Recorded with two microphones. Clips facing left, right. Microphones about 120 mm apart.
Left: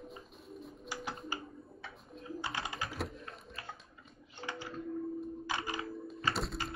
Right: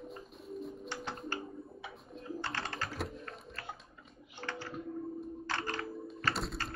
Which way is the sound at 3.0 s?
Centre (ahead or behind).